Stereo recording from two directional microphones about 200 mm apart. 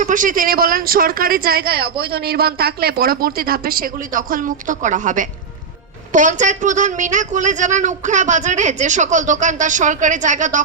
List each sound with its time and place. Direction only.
0.0 s speech: 40° right (ahead or behind)